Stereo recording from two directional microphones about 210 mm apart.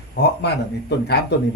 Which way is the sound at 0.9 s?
50° left (ahead or behind).